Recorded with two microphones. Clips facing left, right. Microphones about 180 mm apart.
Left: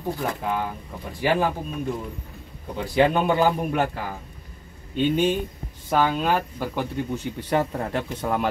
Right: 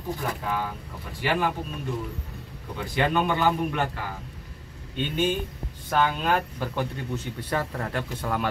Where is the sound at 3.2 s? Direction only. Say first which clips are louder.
Left 3 dB; 35° left (ahead or behind).